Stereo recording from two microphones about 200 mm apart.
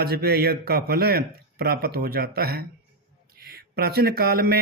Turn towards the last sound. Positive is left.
turn(degrees=-50)  # may be behind; listen again after turning